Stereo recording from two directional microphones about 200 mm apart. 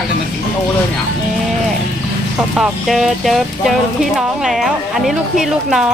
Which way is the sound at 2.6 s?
Centre (ahead or behind).